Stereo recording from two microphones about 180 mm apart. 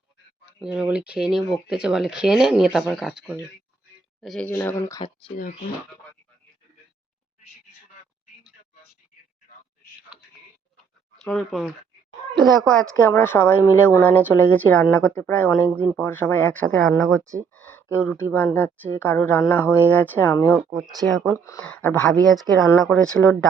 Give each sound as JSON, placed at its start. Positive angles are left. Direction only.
{"t": 0.6, "sound": "speech", "side_deg": -5}
{"t": 4.9, "sound": "speech", "side_deg": 30}
{"t": 11.2, "sound": "speech", "side_deg": 5}
{"t": 17.5, "sound": "a sound", "side_deg": 10}
{"t": 18.1, "sound": "speech", "side_deg": 10}
{"t": 21.0, "sound": "speech", "side_deg": -30}
{"t": 21.3, "sound": "speech", "side_deg": 15}